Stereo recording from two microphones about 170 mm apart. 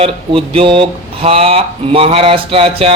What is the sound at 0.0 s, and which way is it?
Speech, 35° right (ahead or behind).